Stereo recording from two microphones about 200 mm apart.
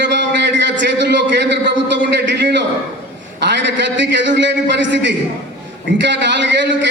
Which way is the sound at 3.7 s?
65° right (ahead or behind).